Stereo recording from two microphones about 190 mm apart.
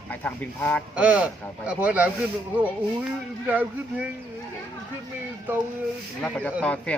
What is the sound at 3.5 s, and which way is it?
Speech, 10° right (ahead or behind).